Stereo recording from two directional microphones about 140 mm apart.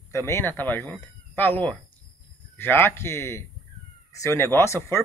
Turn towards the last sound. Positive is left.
turn(degrees=20)  # may be behind; listen again after turning